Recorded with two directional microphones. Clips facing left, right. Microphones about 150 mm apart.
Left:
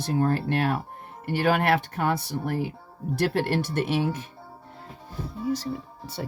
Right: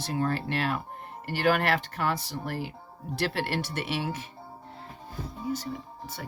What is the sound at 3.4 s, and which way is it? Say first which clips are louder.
Speech: left 6 dB; 45° left (ahead or behind).